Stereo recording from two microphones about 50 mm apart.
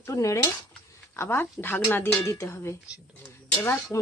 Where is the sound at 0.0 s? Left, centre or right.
Left.